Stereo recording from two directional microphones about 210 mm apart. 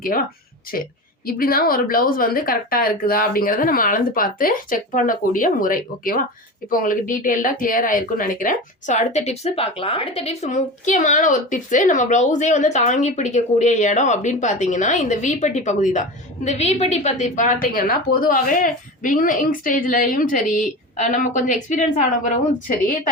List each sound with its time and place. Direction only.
0.1 s a woman's voice: 40° left (ahead or behind)